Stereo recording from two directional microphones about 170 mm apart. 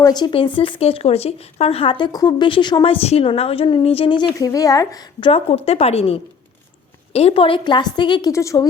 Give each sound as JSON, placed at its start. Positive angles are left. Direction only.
{"t": 0.0, "sound": "speech", "side_deg": 25}
{"t": 4.4, "sound": "a woman's voice", "side_deg": 20}
{"t": 5.3, "sound": "a woman's voice", "side_deg": 35}